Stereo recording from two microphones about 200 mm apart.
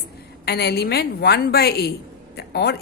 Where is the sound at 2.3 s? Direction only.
55° left (ahead or behind).